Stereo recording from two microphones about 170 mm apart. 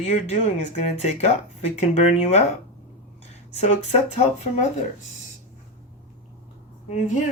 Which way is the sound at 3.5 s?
40° left (ahead or behind).